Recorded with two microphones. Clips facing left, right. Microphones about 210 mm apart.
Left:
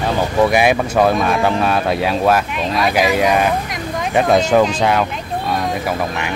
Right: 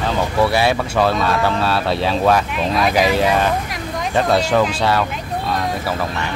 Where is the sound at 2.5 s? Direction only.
Centre (ahead or behind); by 5.0 s 15° left (ahead or behind).